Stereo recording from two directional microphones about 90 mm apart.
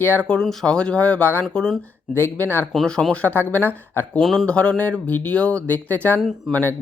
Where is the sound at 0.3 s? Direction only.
10° left (ahead or behind).